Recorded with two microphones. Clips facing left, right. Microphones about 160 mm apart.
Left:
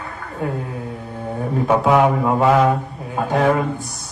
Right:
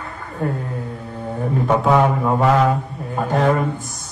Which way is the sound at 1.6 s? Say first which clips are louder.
Left 1 dB; 5° left (ahead or behind).